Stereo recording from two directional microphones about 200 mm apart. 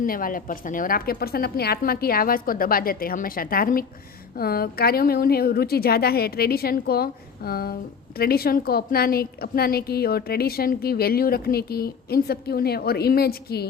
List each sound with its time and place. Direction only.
0.0 s a woman's voice: 45° left (ahead or behind)